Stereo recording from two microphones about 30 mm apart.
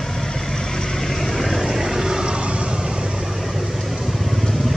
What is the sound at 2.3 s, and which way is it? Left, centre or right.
Vehicle, right.